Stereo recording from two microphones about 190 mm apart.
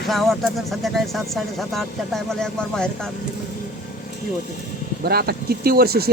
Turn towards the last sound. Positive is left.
turn(degrees=-55)  # may be behind; listen again after turning